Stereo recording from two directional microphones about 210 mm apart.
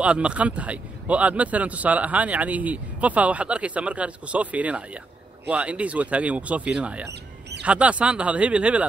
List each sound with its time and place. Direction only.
0.0 s speech: 5° right (ahead or behind)